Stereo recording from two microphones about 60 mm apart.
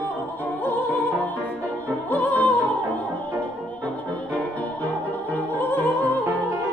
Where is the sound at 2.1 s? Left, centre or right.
Left.